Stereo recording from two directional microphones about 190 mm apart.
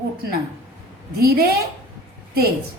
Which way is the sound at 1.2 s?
55° right (ahead or behind).